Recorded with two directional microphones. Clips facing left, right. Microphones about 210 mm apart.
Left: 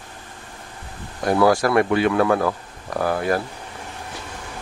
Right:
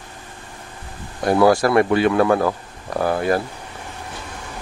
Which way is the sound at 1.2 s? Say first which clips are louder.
Right 2 dB; 25° right (ahead or behind).